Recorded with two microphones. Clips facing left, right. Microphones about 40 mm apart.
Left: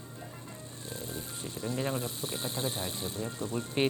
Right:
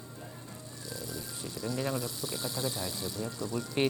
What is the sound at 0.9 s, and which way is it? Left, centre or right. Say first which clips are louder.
Speech: left 1 dB; left.